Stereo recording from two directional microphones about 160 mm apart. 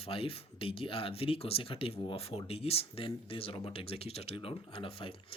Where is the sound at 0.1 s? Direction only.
35° left (ahead or behind).